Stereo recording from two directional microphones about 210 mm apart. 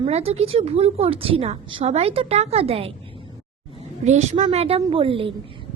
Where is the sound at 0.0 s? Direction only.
30° right (ahead or behind).